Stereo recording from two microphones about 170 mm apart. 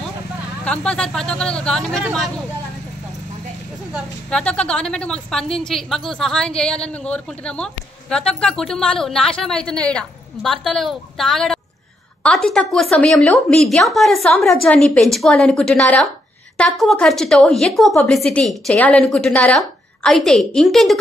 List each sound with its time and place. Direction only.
0.7 s speech: 5° left (ahead or behind)
4.3 s speech: 5° left (ahead or behind)